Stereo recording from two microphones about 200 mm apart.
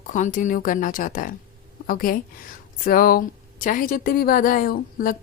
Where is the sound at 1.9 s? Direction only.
45° left (ahead or behind).